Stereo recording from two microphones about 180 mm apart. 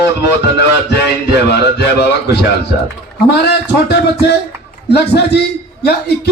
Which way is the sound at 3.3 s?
70° left (ahead or behind).